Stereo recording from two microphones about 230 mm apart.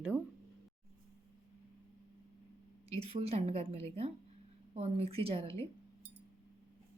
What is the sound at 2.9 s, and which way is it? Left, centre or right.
A woman's voice, right.